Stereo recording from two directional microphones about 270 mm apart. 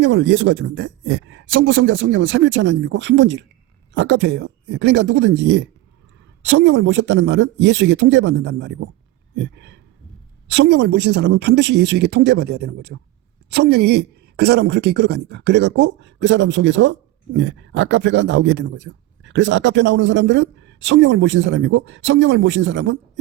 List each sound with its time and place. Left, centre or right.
0.0 s a man's voice: right
9.3 s a sound: right
10.6 s speech: right